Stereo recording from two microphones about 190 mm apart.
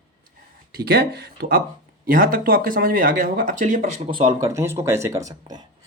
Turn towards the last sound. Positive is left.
turn(degrees=-20)  # may be behind; listen again after turning